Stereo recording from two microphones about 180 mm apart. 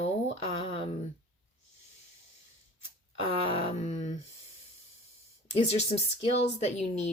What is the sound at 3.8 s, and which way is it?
Speech, 40° left (ahead or behind).